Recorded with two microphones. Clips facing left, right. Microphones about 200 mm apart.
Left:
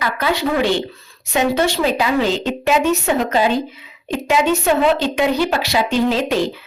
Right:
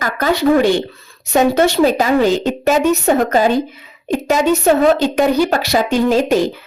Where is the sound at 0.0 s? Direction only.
45° right (ahead or behind).